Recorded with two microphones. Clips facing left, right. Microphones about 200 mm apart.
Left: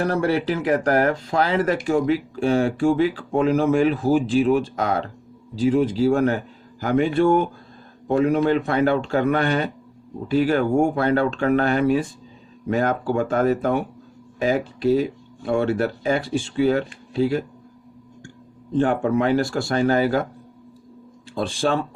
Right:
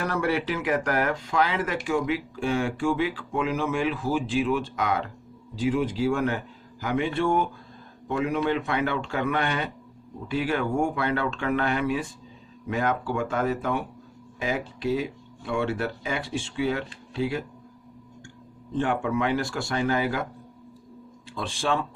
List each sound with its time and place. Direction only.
0.0 s speech: 35° left (ahead or behind)
18.8 s speech: 40° left (ahead or behind)
21.3 s speech: 40° left (ahead or behind)